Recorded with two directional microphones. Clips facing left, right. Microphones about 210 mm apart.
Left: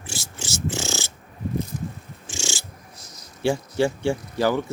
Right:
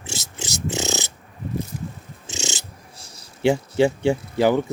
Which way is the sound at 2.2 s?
20° right (ahead or behind).